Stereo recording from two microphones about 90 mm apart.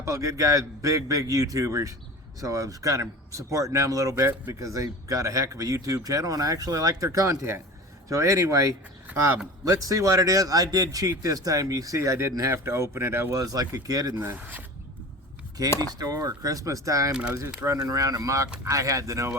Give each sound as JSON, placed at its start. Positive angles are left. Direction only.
{"t": 0.0, "sound": "speech", "side_deg": -35}
{"t": 13.4, "sound": "speech", "side_deg": -45}
{"t": 14.2, "sound": "speech", "side_deg": -25}
{"t": 15.8, "sound": "speech", "side_deg": -45}